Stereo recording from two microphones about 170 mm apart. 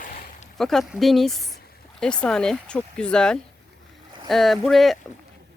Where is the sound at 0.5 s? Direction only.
Centre (ahead or behind).